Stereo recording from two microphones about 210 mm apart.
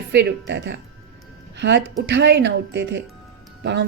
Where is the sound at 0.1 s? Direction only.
55° right (ahead or behind).